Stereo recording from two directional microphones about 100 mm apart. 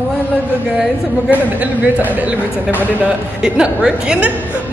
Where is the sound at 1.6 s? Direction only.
15° right (ahead or behind).